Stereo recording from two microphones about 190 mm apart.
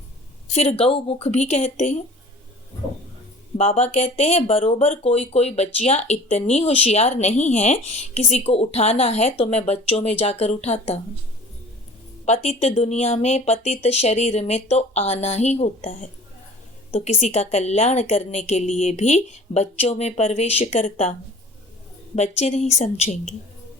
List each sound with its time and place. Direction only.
0.5 s speech: 30° left (ahead or behind)
3.6 s speech: 35° left (ahead or behind)
12.2 s speech: 35° left (ahead or behind)
22.1 s speech: 35° left (ahead or behind)